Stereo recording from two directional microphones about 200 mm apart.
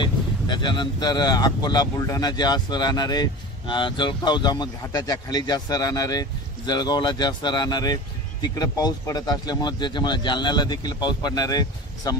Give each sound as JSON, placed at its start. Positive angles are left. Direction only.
{"t": 0.0, "sound": "speech", "side_deg": 25}